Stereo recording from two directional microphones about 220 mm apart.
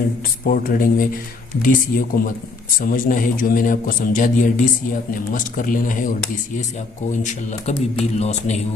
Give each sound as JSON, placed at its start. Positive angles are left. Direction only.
{"t": 0.4, "sound": "a man's voice", "side_deg": 40}
{"t": 7.1, "sound": "a man's voice", "side_deg": 35}